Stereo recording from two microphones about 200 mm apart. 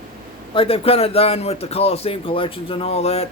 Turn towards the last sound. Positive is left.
turn(degrees=30)  # may be behind; listen again after turning